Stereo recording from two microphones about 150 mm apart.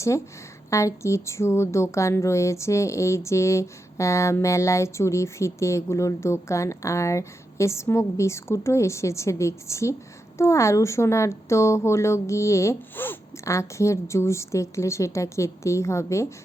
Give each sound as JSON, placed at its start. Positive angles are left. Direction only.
{"t": 0.7, "sound": "speech", "side_deg": 20}